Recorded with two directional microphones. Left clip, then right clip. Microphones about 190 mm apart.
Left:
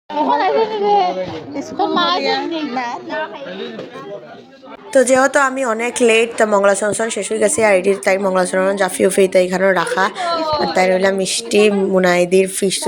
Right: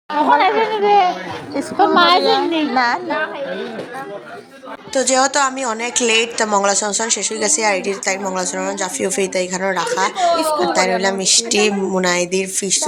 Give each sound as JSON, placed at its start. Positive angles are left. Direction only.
{"t": 0.5, "sound": "a child's voice", "side_deg": -15}
{"t": 1.8, "sound": "a woman's voice", "side_deg": -40}
{"t": 2.2, "sound": "a child's voice", "side_deg": -15}
{"t": 4.9, "sound": "a woman's voice", "side_deg": 20}